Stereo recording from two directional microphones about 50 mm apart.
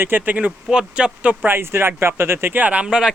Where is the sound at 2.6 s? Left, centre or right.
Right.